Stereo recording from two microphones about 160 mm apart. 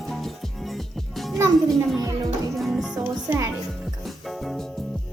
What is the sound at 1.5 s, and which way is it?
Speech, centre (ahead or behind).